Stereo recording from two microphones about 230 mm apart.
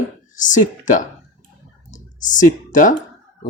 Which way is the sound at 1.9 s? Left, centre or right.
Left.